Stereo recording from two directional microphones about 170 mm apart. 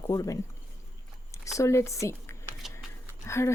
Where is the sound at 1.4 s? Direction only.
15° left (ahead or behind).